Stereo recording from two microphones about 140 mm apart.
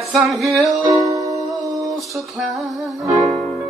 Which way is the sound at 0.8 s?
25° right (ahead or behind).